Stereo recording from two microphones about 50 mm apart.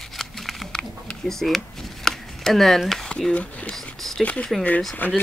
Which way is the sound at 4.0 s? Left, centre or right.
Centre.